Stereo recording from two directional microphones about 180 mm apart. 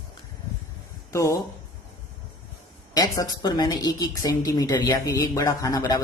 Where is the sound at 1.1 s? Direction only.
15° left (ahead or behind).